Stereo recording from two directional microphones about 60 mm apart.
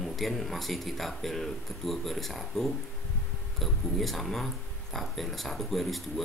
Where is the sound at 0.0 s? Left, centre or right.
Centre.